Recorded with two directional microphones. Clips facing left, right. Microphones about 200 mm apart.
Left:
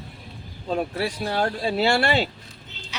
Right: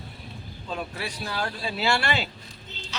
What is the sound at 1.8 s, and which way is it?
Speech, 30° left (ahead or behind).